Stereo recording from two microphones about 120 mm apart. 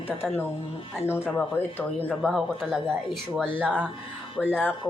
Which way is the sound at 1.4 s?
15° left (ahead or behind).